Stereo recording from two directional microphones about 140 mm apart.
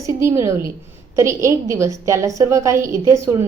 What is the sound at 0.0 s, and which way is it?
A woman's voice, 20° right (ahead or behind).